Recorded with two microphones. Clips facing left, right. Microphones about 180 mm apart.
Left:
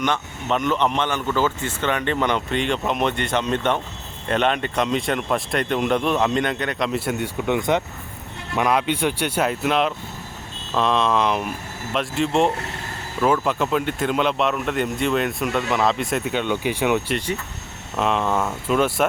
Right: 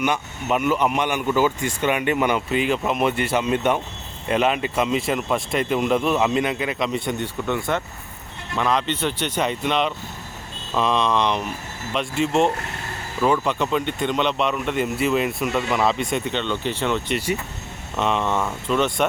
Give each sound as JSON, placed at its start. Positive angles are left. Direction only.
{"t": 0.0, "sound": "speech", "side_deg": -10}
{"t": 7.4, "sound": "speech", "side_deg": 15}
{"t": 17.2, "sound": "speech", "side_deg": -10}
{"t": 17.9, "sound": "speech", "side_deg": 0}